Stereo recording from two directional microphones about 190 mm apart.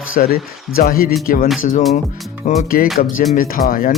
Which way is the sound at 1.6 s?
40° left (ahead or behind).